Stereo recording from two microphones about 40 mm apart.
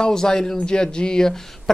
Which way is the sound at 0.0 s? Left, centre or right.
Centre.